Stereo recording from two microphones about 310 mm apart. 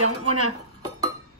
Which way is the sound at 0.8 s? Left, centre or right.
Centre.